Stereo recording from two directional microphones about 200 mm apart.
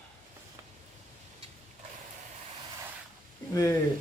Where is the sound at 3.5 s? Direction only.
15° left (ahead or behind).